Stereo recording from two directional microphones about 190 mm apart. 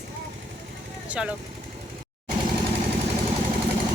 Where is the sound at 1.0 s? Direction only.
5° right (ahead or behind).